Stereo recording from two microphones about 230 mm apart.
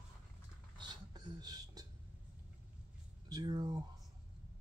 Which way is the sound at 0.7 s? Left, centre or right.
Centre.